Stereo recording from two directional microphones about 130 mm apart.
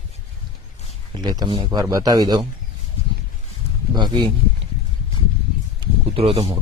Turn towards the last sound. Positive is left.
turn(degrees=-50)  # may be behind; listen again after turning